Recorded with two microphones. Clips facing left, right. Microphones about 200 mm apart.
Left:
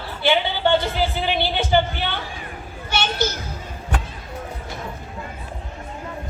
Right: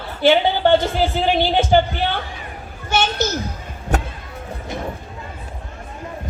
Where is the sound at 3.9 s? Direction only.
45° right (ahead or behind).